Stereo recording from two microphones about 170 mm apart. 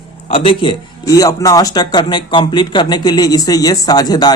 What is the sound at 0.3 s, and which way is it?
Speech, 30° left (ahead or behind).